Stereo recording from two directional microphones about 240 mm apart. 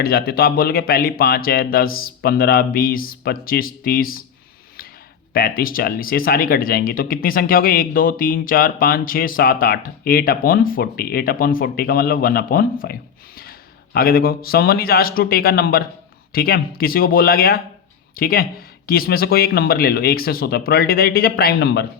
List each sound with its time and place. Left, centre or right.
0.0 s speech: left
5.3 s speech: left